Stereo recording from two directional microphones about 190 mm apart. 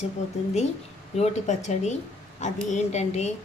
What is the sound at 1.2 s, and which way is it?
Speech, 35° left (ahead or behind).